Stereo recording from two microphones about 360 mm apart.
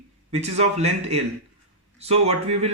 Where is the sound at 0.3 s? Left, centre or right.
Centre.